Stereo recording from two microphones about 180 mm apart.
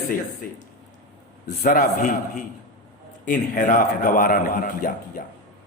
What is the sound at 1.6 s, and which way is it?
A man's voice, 50° left (ahead or behind).